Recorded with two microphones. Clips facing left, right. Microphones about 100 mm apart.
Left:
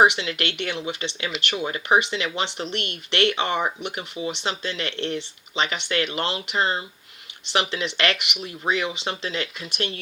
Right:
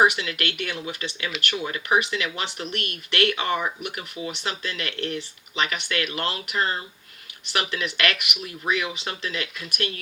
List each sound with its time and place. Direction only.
0.0 s speech: 25° left (ahead or behind)